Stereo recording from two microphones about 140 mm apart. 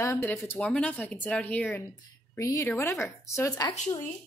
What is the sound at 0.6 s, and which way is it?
A woman's voice, 5° left (ahead or behind).